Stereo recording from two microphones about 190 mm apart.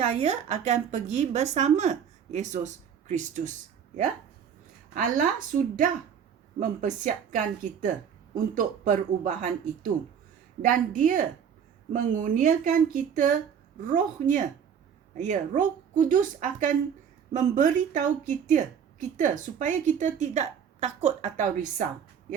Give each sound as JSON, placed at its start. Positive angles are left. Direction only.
{"t": 0.0, "sound": "a woman's voice", "side_deg": -35}
{"t": 4.9, "sound": "a woman's voice", "side_deg": -45}